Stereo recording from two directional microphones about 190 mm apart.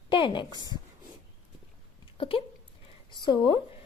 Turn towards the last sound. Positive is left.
turn(degrees=25)  # may be behind; listen again after turning